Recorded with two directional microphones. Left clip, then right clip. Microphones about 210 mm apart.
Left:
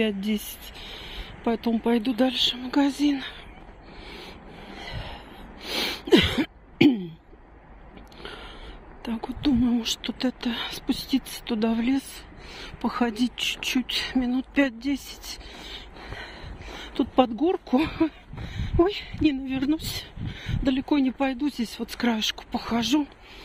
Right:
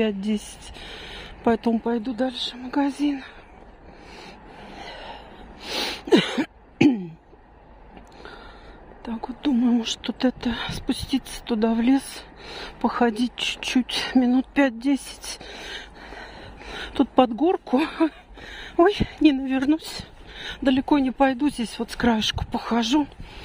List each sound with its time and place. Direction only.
0.0 s speech: 10° right (ahead or behind)
1.8 s speech: 5° left (ahead or behind)
4.7 s a sound: 10° right (ahead or behind)
9.0 s speech: 5° right (ahead or behind)
9.5 s speech: 15° right (ahead or behind)
11.9 s speech: 25° right (ahead or behind); by 20.1 s 10° right (ahead or behind)
20.3 s speech: 25° right (ahead or behind)